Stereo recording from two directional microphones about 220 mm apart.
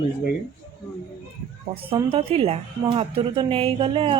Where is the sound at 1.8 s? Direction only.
25° right (ahead or behind).